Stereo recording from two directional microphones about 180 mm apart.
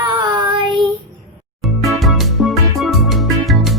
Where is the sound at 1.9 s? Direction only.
Centre (ahead or behind).